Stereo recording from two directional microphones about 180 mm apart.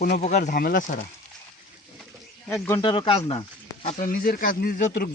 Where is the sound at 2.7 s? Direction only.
25° left (ahead or behind).